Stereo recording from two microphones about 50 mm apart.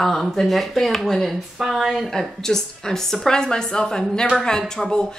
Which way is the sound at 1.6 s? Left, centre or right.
Centre.